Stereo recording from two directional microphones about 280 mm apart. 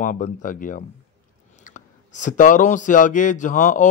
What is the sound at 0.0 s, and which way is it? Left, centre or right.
Speech, left.